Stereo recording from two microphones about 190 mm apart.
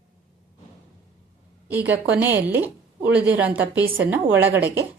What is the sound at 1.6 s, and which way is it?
A woman's voice, 10° right (ahead or behind).